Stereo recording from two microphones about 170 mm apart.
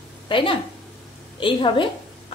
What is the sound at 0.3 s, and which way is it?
A woman's voice, 30° left (ahead or behind).